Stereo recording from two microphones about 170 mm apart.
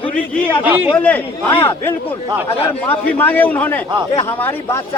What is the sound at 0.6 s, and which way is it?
Speech, 10° right (ahead or behind).